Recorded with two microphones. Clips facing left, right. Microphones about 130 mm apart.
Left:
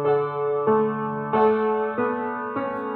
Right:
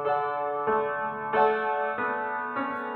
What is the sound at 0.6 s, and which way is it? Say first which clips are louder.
Music: left 7 dB; 25° left (ahead or behind).